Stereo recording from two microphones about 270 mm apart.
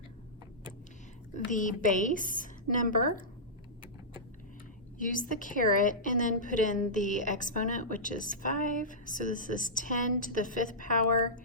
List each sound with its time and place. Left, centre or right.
1.5 s a woman's voice: left
4.9 s a woman's voice: left